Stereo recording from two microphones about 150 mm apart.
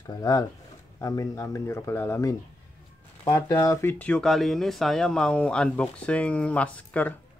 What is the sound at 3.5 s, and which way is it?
Speech, 20° left (ahead or behind).